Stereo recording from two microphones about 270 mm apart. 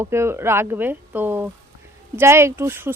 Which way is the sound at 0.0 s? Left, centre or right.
Centre.